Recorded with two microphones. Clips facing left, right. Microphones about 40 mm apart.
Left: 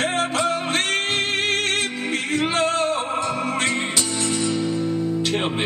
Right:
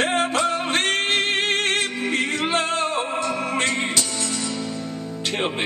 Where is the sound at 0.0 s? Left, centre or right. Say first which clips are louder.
Right 1 dB; centre.